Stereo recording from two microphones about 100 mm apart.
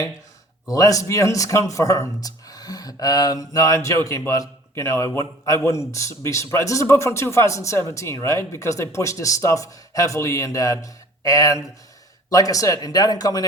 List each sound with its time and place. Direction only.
0.7 s a man's voice: 35° left (ahead or behind)